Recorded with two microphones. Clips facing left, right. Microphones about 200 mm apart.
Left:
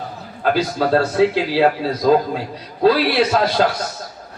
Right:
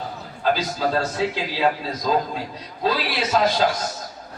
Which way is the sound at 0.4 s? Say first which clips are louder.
Left 4 dB; 60° left (ahead or behind).